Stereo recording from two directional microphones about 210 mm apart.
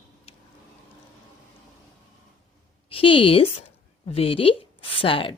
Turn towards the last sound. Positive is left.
turn(degrees=25)  # may be behind; listen again after turning